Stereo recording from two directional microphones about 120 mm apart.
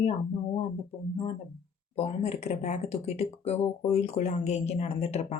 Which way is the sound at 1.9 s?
60° left (ahead or behind).